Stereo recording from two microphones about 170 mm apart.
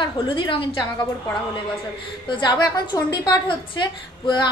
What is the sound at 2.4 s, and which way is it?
A woman's voice, 25° left (ahead or behind).